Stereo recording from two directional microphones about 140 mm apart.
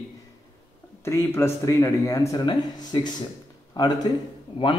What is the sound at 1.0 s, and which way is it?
A man's voice, 20° left (ahead or behind).